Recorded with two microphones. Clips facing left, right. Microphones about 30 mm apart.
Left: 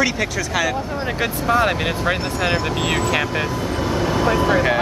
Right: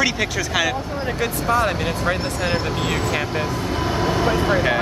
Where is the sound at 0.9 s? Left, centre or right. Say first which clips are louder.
Left 1 dB; left.